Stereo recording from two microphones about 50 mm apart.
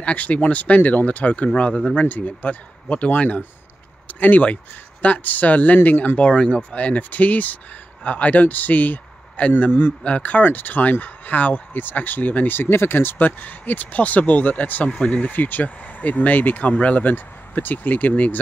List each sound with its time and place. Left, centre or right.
0.0 s speech: left
10.0 s speech: left
12.5 s speech: left